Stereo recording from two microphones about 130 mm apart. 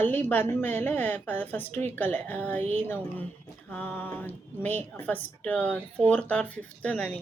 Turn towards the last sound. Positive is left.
turn(degrees=10)  # may be behind; listen again after turning